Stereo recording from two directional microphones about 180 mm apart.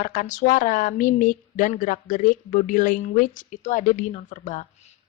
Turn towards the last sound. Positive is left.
turn(degrees=45)  # may be behind; listen again after turning